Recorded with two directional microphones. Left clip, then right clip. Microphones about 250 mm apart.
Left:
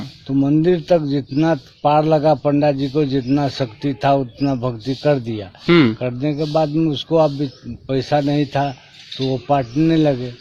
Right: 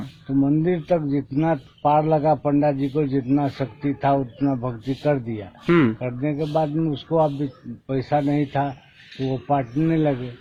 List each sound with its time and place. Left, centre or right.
0.3 s speech: left
5.6 s speech: centre
6.0 s speech: left